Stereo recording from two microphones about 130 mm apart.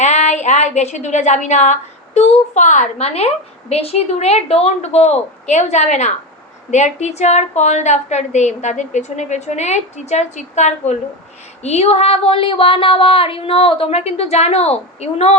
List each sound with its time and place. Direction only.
0.0 s a woman's voice: 60° left (ahead or behind)
3.7 s a woman's voice: 50° left (ahead or behind)